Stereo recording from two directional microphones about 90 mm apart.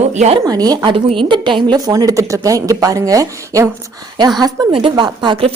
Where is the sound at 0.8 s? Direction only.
65° right (ahead or behind); by 3.6 s 40° right (ahead or behind).